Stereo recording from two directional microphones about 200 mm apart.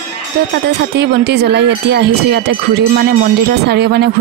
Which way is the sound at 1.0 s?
55° right (ahead or behind).